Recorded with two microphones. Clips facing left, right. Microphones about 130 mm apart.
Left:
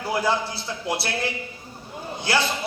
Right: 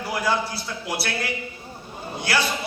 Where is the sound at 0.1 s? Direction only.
25° left (ahead or behind).